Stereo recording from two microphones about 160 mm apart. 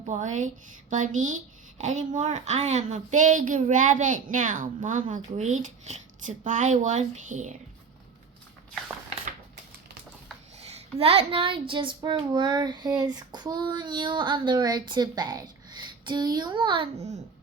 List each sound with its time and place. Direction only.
0.1 s a woman's voice: 50° right (ahead or behind)
10.8 s a child's voice: 40° right (ahead or behind)
13.0 s female singing: 25° right (ahead or behind)